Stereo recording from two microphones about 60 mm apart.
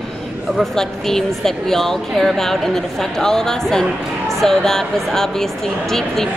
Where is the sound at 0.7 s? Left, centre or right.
Centre.